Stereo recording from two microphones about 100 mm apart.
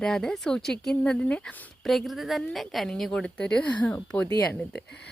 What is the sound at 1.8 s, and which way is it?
A woman's voice, centre (ahead or behind).